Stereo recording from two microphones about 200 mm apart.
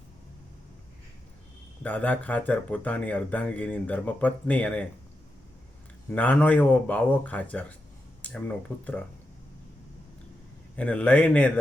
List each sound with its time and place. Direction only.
1.8 s speech: 5° left (ahead or behind)
6.1 s speech: 5° left (ahead or behind)
10.8 s speech: 5° left (ahead or behind)